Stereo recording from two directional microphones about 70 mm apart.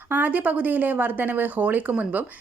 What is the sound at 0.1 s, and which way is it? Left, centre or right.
Speech, right.